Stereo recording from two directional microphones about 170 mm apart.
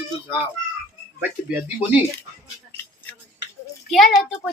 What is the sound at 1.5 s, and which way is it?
Speech, 10° right (ahead or behind).